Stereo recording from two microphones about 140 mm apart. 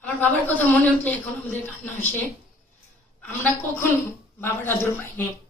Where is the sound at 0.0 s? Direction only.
10° left (ahead or behind).